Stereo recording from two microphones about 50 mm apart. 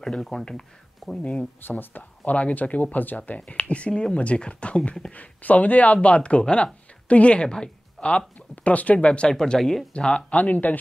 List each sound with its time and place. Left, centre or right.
0.0 s speech: centre
1.6 s speech: left; by 8.2 s centre
8.4 s speech: left
9.3 s speech: centre
9.9 s speech: left